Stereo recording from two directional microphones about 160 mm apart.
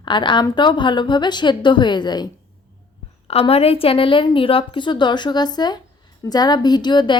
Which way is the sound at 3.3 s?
40° left (ahead or behind).